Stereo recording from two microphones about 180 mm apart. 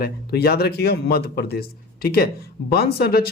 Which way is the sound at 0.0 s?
60° left (ahead or behind).